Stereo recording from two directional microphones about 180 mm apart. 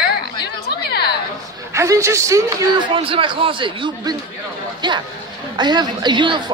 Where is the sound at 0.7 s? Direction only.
65° left (ahead or behind).